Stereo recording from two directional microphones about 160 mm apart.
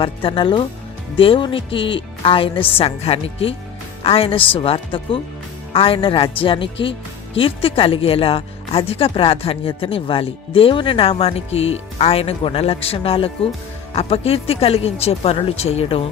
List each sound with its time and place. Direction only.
0.0 s speech: 35° left (ahead or behind)